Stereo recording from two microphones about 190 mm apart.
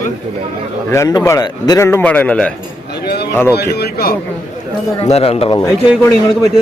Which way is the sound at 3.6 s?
60° left (ahead or behind).